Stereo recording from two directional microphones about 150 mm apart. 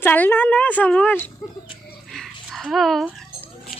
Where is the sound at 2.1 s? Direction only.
Centre (ahead or behind).